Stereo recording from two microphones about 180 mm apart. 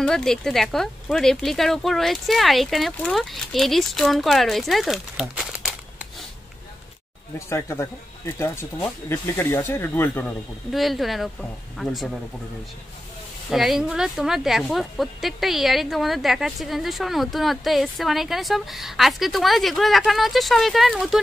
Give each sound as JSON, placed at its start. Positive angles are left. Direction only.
{"t": 0.0, "sound": "speech", "side_deg": 5}
{"t": 7.3, "sound": "speech", "side_deg": 15}
{"t": 10.7, "sound": "speech", "side_deg": 0}
{"t": 13.5, "sound": "speech", "side_deg": 0}